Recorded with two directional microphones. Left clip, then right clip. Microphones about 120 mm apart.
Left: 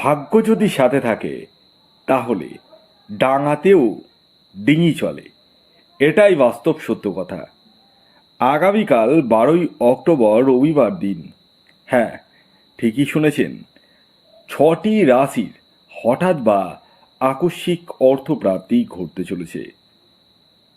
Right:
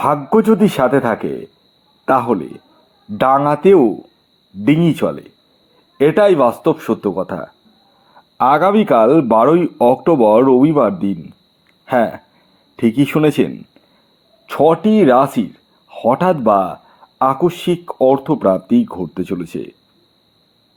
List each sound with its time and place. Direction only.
0.0 s speech: 40° right (ahead or behind)